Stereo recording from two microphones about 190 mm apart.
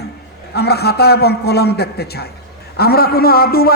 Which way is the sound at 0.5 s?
60° left (ahead or behind).